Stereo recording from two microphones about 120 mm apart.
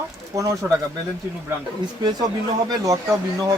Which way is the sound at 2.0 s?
35° right (ahead or behind).